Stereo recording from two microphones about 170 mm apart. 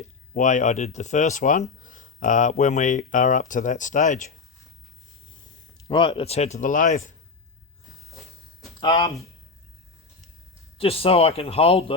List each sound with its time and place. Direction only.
0.3 s speech: 45° left (ahead or behind)
5.7 s speech: 30° left (ahead or behind); by 7.1 s 50° left (ahead or behind)
8.8 s speech: 25° left (ahead or behind)
10.8 s speech: 35° left (ahead or behind)